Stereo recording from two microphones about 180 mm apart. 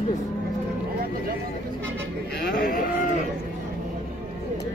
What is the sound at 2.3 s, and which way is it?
Livestock, 50° left (ahead or behind).